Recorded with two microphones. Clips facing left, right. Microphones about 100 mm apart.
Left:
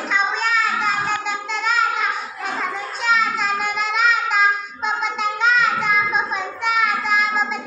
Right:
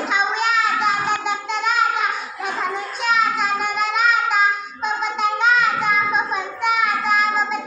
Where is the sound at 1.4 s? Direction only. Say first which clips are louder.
Even; 10° right (ahead or behind).